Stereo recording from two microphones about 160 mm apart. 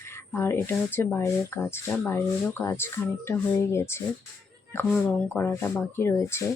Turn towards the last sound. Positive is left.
turn(degrees=15)  # may be behind; listen again after turning